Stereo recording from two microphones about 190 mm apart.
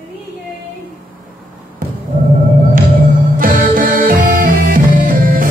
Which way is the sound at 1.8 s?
50° right (ahead or behind).